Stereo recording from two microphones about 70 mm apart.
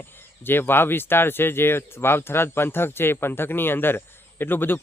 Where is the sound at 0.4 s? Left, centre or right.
Left.